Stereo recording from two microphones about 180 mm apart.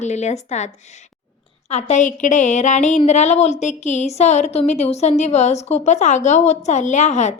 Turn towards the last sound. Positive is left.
turn(degrees=40)  # may be behind; listen again after turning